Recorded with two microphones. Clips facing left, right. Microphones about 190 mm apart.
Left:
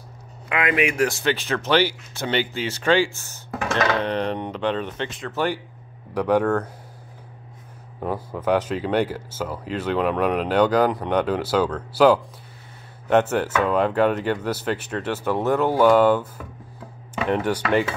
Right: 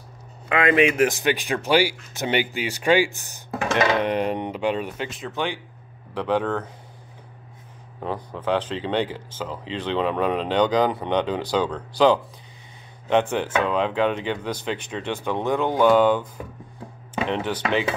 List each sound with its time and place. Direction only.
0.5 s speech: 30° right (ahead or behind); by 5.3 s 10° right (ahead or behind)
5.3 s speech: 5° left (ahead or behind)
8.0 s speech: 10° left (ahead or behind)
17.3 s speech: 10° left (ahead or behind)
17.6 s speech: 15° right (ahead or behind)